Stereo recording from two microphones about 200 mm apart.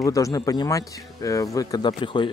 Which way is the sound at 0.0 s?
15° left (ahead or behind).